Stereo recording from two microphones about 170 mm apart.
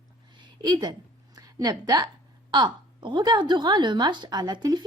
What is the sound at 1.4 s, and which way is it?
A woman's voice, 20° right (ahead or behind).